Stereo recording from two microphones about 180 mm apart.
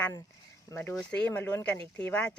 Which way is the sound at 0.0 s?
10° left (ahead or behind).